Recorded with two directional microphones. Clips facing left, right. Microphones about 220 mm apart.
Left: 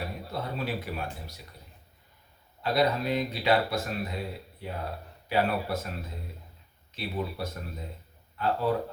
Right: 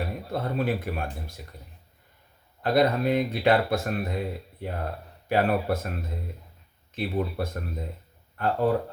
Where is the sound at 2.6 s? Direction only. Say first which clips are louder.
Right 4 dB; 50° right (ahead or behind).